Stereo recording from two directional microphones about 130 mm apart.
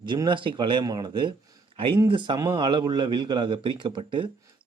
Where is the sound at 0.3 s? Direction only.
40° right (ahead or behind).